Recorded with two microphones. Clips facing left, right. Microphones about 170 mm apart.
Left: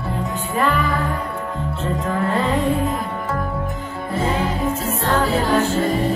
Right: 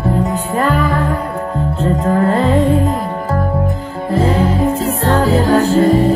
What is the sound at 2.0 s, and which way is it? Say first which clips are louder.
Music: right 7 dB; 40° right (ahead or behind).